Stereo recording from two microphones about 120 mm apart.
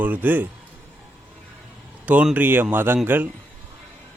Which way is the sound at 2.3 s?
15° right (ahead or behind).